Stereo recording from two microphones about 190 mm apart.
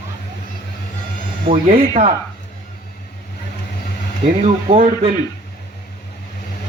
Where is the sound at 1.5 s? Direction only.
30° right (ahead or behind).